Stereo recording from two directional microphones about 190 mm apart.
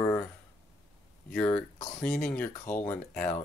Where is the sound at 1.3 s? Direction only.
10° left (ahead or behind).